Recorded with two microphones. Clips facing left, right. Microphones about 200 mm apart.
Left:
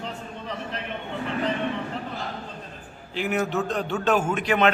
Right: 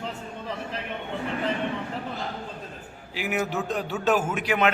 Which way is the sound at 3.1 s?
10° right (ahead or behind).